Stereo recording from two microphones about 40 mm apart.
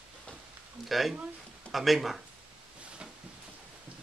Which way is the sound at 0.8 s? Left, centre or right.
Centre.